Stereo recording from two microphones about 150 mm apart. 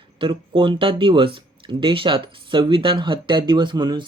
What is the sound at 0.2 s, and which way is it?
Speech, 35° right (ahead or behind).